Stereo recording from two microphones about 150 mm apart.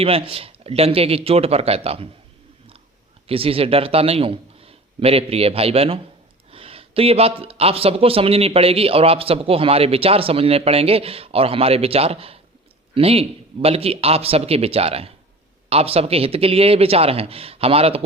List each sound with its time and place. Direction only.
0.0 s speech: 40° right (ahead or behind)
3.2 s a man's voice: 40° right (ahead or behind)